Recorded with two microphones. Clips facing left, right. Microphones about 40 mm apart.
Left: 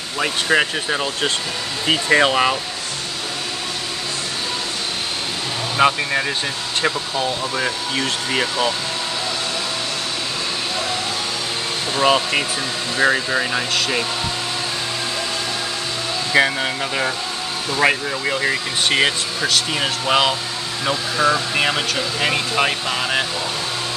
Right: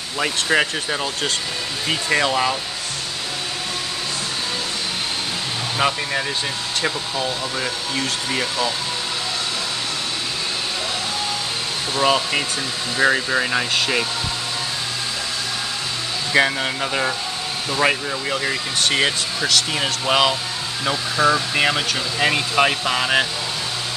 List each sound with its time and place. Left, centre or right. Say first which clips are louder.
0.2 s speech: left 1 dB; centre
1.9 s speech: left 4 dB; left
5.8 s speech: left 5 dB; centre
11.9 s speech: left 2 dB; centre
16.3 s speech: left 1 dB; centre